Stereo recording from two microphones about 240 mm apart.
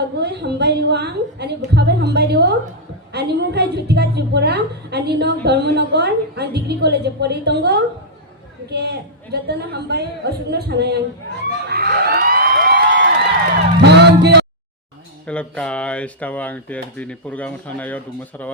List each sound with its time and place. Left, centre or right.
0.2 s a woman's voice: right
11.7 s a sound: right
13.9 s music: right
15.3 s speech: centre